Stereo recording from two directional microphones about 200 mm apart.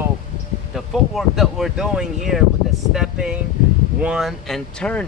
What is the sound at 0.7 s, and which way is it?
Speech, centre (ahead or behind).